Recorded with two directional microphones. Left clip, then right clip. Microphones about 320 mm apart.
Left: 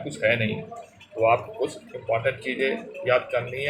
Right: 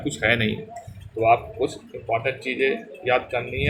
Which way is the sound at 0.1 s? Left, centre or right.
Right.